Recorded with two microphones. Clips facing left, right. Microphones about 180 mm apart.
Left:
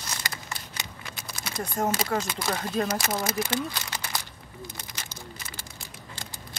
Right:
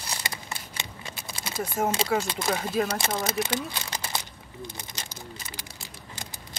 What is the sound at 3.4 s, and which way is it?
Speech, 20° right (ahead or behind).